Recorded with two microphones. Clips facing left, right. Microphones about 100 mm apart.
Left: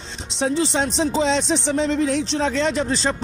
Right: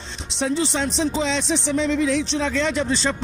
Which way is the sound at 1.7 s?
45° left (ahead or behind).